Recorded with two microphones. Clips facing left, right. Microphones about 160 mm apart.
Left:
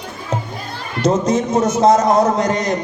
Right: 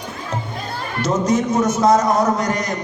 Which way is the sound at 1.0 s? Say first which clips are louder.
Left 2 dB; 30° left (ahead or behind).